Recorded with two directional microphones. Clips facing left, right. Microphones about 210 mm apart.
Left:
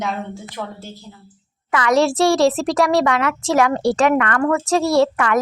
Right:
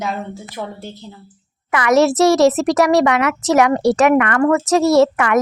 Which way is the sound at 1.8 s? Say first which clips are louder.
Right 3 dB; 20° right (ahead or behind).